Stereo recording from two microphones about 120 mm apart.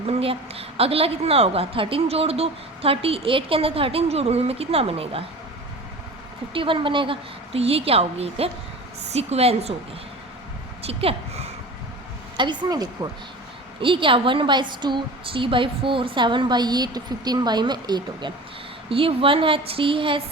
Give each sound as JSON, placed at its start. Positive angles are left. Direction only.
{"t": 0.1, "sound": "a woman's voice", "side_deg": -55}
{"t": 6.5, "sound": "a woman's voice", "side_deg": -45}
{"t": 10.8, "sound": "a sound", "side_deg": -55}
{"t": 12.4, "sound": "a woman's voice", "side_deg": -35}
{"t": 13.8, "sound": "a woman's voice", "side_deg": -45}
{"t": 18.9, "sound": "a woman's voice", "side_deg": -50}